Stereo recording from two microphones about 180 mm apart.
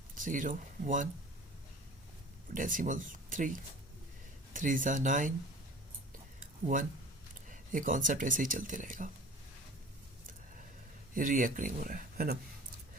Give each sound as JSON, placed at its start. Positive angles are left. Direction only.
{"t": 0.2, "sound": "speech", "side_deg": -45}
{"t": 2.6, "sound": "speech", "side_deg": -50}
{"t": 7.4, "sound": "speech", "side_deg": -45}
{"t": 11.1, "sound": "speech", "side_deg": -50}